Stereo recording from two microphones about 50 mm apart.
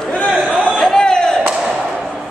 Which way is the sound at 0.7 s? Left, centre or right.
Centre.